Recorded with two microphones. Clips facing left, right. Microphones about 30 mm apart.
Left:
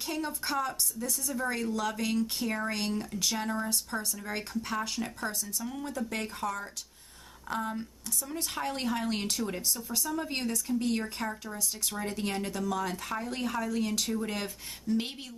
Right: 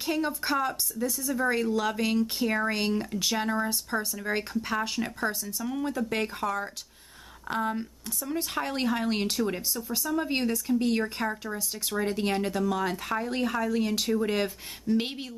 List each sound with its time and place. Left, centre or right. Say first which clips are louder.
0.0 s a woman's voice: right 5 dB; right
8.2 s speech: right 4 dB; centre
9.7 s speech: right 2 dB; centre
10.1 s speech: right 7 dB; centre